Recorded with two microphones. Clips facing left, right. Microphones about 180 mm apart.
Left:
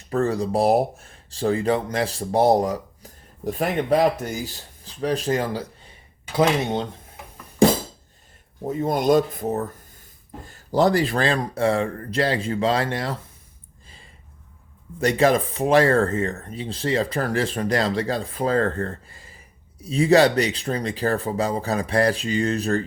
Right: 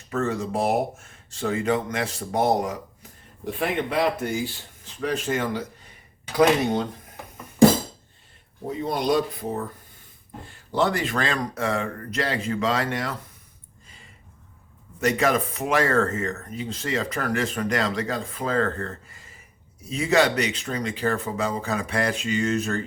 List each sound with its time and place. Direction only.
0.1 s speech: 35° left (ahead or behind)
8.7 s speech: 45° left (ahead or behind); by 13.1 s 30° left (ahead or behind)
13.8 s a sound: 30° left (ahead or behind)
15.0 s speech: 30° left (ahead or behind)